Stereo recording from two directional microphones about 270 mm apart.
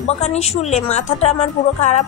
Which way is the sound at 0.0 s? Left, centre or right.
Left.